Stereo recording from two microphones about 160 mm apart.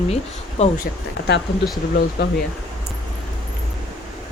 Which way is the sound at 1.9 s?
75° left (ahead or behind).